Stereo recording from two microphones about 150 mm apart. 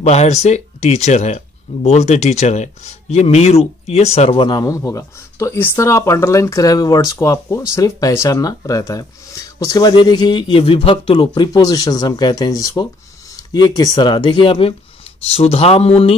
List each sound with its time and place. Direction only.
0.0 s speech: 45° left (ahead or behind)